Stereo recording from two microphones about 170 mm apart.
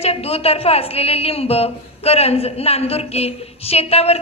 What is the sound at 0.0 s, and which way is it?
A woman's voice, 35° left (ahead or behind).